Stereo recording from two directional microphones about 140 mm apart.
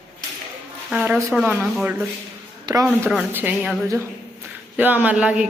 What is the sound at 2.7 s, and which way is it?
Speech, 30° right (ahead or behind).